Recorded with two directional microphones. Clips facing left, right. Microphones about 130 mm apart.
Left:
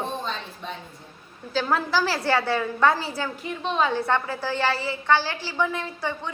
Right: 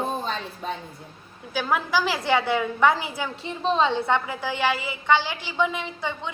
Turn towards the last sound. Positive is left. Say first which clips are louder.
# left 1 dB
turn(degrees=-20)  # may be behind; listen again after turning